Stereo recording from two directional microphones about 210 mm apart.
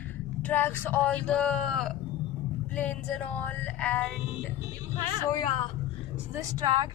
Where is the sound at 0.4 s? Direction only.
10° left (ahead or behind).